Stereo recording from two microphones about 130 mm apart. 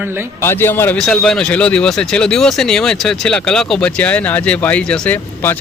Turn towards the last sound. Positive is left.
turn(degrees=15)  # may be behind; listen again after turning